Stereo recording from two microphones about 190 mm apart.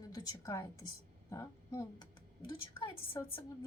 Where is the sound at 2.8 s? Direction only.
30° left (ahead or behind).